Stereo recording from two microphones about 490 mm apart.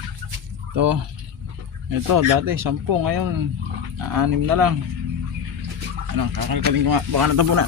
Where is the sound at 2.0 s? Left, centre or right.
Right.